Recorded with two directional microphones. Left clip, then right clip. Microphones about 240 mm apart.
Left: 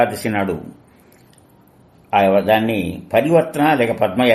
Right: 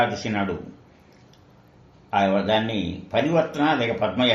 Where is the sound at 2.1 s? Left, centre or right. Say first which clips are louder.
Left 7 dB; left.